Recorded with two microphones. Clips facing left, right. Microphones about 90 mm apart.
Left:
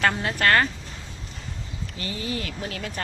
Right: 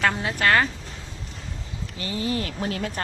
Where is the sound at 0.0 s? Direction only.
Centre (ahead or behind).